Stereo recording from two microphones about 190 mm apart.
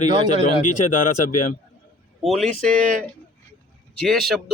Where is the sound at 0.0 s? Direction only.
40° left (ahead or behind).